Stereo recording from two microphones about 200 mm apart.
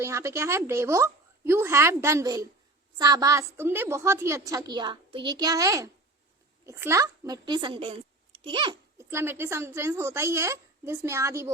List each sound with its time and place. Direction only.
0.0 s a woman's voice: 15° right (ahead or behind)
9.0 s a woman's voice: 15° right (ahead or behind)